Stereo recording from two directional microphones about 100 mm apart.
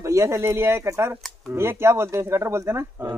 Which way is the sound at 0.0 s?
30° right (ahead or behind).